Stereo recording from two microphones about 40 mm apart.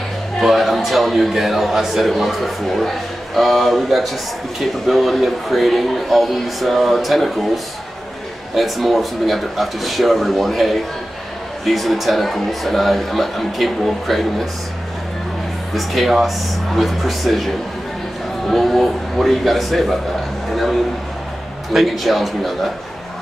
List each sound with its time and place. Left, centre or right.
0.4 s speech: centre
15.7 s speech: centre
18.5 s a man's voice: centre
20.5 s a sound: centre
21.7 s speech: centre